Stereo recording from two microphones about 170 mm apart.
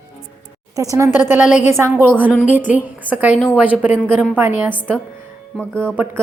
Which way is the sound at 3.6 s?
10° right (ahead or behind).